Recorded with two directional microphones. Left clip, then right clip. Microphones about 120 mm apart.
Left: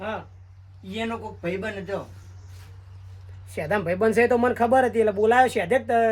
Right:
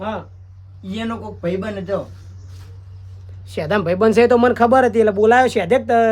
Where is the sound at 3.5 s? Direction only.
55° right (ahead or behind).